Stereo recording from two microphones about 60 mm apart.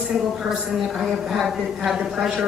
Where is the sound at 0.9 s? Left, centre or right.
Centre.